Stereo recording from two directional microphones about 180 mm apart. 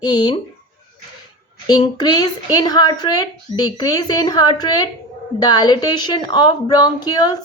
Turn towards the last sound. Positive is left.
turn(degrees=20)  # may be behind; listen again after turning